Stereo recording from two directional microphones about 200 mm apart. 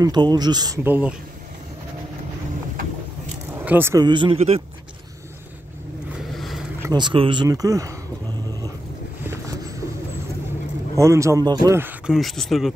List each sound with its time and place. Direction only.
0.0 s speech: 20° right (ahead or behind)
0.8 s speech: 10° right (ahead or behind)
3.5 s speech: 10° right (ahead or behind); by 4.6 s 30° right (ahead or behind)
6.1 s vehicle: centre (ahead or behind)
6.8 s speech: 20° right (ahead or behind)
9.2 s vehicle: 15° right (ahead or behind)
11.0 s speech: 15° right (ahead or behind)
12.1 s speech: centre (ahead or behind)